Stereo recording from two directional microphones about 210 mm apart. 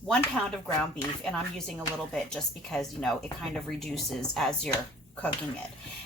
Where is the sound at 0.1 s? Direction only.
5° left (ahead or behind).